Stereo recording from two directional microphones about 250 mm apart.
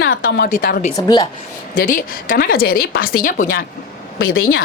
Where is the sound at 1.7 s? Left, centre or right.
Left.